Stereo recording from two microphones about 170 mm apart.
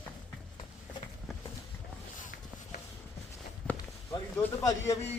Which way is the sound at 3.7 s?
20° left (ahead or behind).